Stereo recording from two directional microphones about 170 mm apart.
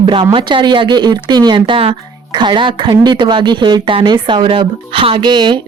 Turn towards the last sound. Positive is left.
turn(degrees=-25)  # may be behind; listen again after turning